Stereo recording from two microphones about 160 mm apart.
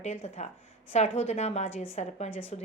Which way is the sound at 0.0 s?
45° left (ahead or behind).